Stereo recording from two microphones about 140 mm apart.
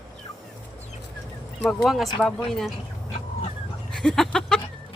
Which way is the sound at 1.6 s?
Centre (ahead or behind).